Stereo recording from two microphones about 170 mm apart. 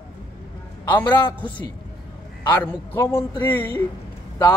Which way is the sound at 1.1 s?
25° left (ahead or behind).